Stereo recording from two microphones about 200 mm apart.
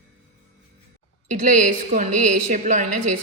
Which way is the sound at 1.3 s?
40° right (ahead or behind).